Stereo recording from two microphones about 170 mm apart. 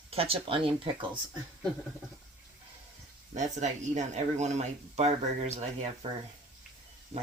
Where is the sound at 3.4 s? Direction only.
45° right (ahead or behind).